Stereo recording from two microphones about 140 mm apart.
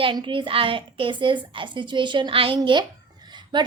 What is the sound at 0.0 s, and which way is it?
A woman's voice, 35° right (ahead or behind).